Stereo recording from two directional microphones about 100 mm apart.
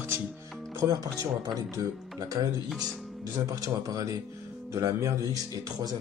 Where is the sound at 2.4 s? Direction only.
40° right (ahead or behind).